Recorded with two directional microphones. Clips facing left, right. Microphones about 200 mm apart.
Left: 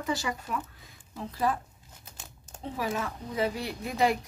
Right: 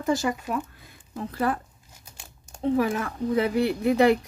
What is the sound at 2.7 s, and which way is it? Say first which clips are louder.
Speech: right 6 dB; 55° right (ahead or behind).